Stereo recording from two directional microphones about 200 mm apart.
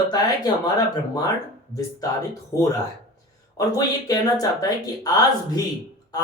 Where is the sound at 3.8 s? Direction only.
20° left (ahead or behind).